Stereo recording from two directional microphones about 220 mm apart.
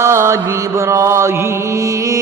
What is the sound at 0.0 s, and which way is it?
Mantra, 10° right (ahead or behind).